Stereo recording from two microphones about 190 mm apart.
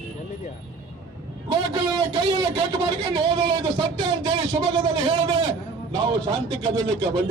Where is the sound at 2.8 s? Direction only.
25° right (ahead or behind).